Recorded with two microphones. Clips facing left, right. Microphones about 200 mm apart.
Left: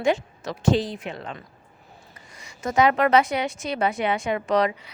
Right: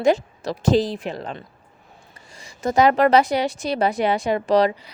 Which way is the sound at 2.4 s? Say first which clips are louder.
Right 3 dB; 35° right (ahead or behind).